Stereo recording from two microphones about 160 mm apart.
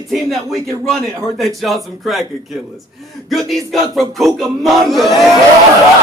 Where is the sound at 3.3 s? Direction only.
Centre (ahead or behind).